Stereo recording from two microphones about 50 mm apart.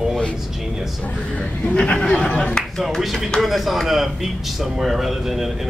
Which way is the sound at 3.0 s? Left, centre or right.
Centre.